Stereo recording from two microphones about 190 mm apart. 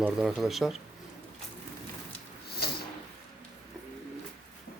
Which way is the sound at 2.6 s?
55° left (ahead or behind).